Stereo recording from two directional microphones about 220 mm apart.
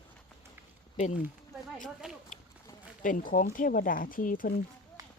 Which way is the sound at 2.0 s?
5° right (ahead or behind).